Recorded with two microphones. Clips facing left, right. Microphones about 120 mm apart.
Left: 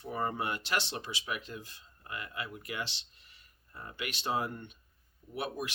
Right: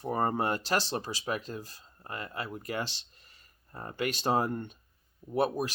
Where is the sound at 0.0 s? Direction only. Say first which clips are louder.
Right 5 dB; 40° right (ahead or behind).